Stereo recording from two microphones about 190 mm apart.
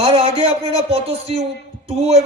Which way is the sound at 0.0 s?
30° right (ahead or behind).